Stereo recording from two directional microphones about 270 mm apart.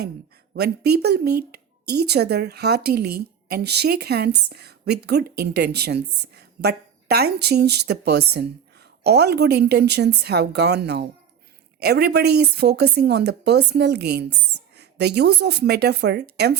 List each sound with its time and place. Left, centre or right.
0.5 s a woman's voice: right